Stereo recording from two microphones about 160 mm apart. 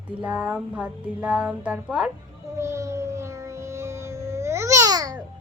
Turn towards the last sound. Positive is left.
turn(degrees=-20)  # may be behind; listen again after turning